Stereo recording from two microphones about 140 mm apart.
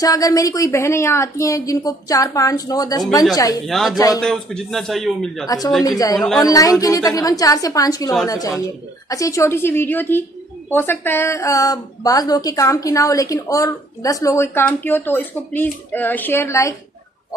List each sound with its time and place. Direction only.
0.0 s a woman's voice: 25° left (ahead or behind)
3.6 s a man's voice: centre (ahead or behind)
5.9 s a woman's voice: 25° left (ahead or behind)